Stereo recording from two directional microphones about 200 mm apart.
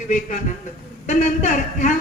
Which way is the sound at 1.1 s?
40° left (ahead or behind).